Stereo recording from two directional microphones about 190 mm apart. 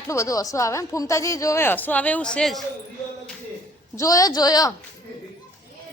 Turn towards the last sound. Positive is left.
turn(degrees=20)  # may be behind; listen again after turning